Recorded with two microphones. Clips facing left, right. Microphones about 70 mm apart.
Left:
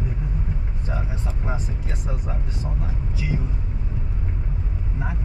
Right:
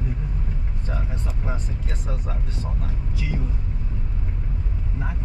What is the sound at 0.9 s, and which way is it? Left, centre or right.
Vehicle, centre.